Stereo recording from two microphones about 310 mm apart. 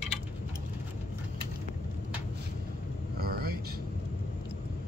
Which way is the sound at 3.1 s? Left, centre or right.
Right.